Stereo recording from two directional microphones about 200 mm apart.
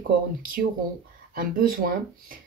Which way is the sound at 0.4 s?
45° right (ahead or behind).